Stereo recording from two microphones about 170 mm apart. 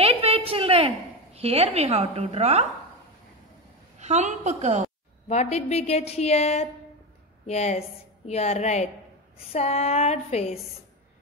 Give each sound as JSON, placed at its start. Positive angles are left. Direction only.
{"t": 0.0, "sound": "a sound", "side_deg": -35}
{"t": 4.0, "sound": "a woman's voice", "side_deg": -45}
{"t": 5.3, "sound": "a woman's voice", "side_deg": 40}